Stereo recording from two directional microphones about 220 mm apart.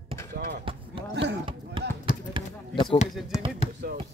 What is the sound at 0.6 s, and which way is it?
Basketball bounce, 25° right (ahead or behind).